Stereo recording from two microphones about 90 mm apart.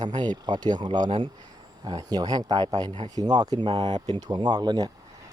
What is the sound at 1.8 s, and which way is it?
Speech, 50° right (ahead or behind).